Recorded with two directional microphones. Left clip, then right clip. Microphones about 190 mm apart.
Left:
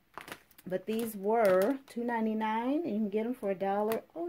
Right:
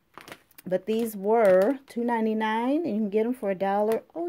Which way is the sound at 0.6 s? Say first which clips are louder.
Right 8 dB; 40° right (ahead or behind).